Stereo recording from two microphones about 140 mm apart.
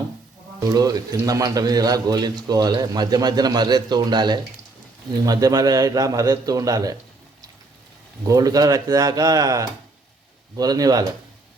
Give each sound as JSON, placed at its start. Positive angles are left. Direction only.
{"t": 0.7, "sound": "a man's voice", "side_deg": -25}
{"t": 8.2, "sound": "a man's voice", "side_deg": -25}